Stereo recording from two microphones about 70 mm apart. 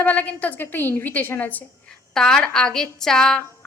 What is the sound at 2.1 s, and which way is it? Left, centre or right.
A woman's voice, centre.